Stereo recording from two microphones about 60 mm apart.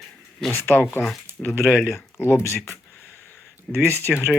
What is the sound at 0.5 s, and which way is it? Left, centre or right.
Speech, left.